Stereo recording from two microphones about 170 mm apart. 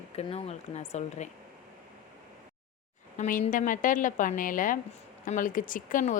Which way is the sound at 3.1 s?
55° left (ahead or behind).